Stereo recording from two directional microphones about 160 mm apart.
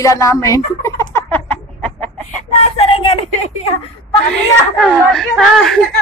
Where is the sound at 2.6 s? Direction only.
35° left (ahead or behind).